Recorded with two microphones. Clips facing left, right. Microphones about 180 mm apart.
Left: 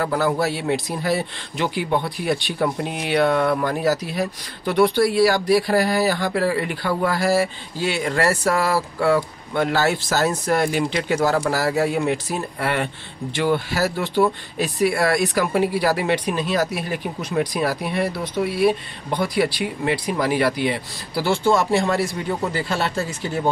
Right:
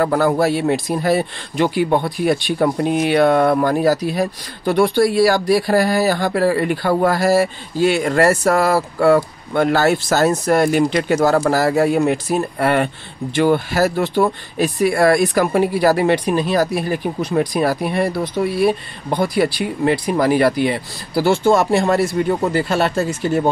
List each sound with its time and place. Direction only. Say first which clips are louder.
0.0 s speech: right 5 dB; 50° right (ahead or behind)